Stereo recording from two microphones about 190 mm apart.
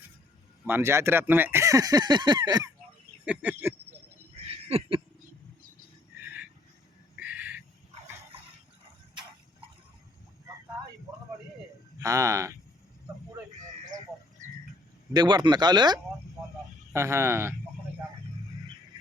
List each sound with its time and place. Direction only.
0.6 s speech: 10° right (ahead or behind)
3.2 s speech: 10° right (ahead or behind)
6.2 s squeal: 10° right (ahead or behind)
7.2 s owl: 5° right (ahead or behind)
11.9 s speech: 15° right (ahead or behind)
15.1 s speech: 20° right (ahead or behind)